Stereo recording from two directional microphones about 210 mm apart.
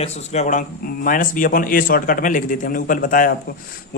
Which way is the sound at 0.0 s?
35° left (ahead or behind).